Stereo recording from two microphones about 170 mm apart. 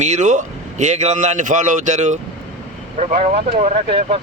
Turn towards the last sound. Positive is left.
turn(degrees=-35)  # may be behind; listen again after turning